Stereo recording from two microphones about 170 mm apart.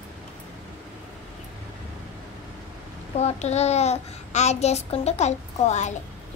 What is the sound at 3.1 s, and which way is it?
A child's voice, 40° left (ahead or behind).